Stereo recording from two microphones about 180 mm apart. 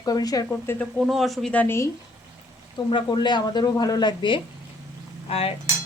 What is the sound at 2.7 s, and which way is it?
Speech, 25° left (ahead or behind).